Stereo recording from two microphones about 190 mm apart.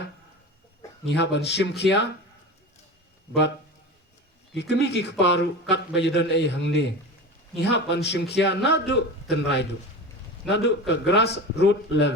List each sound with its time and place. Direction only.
1.0 s a man's voice: 65° left (ahead or behind)
4.5 s a man's voice: 65° left (ahead or behind)